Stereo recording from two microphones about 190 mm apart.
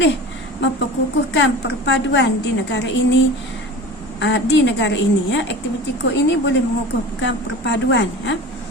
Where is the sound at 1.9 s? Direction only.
70° left (ahead or behind).